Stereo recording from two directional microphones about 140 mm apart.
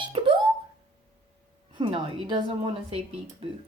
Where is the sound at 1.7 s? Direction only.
35° right (ahead or behind).